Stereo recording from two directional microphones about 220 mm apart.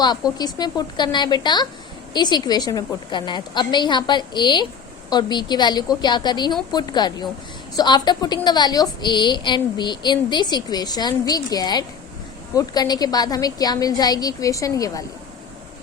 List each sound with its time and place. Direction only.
0.0 s a woman's voice: 20° left (ahead or behind)